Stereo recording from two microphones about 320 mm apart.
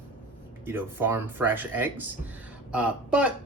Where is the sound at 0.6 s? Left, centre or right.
Centre.